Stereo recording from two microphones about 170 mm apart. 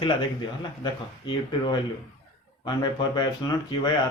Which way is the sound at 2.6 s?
25° left (ahead or behind).